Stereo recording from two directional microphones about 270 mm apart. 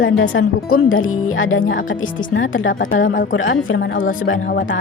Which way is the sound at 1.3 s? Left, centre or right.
Left.